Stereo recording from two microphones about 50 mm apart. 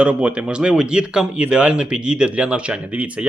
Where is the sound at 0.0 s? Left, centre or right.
Right.